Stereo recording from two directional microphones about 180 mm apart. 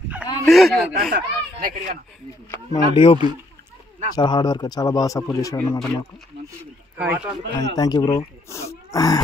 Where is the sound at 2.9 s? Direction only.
30° left (ahead or behind).